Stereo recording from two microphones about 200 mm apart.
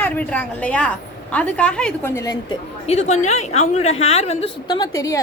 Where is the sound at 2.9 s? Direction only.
35° left (ahead or behind).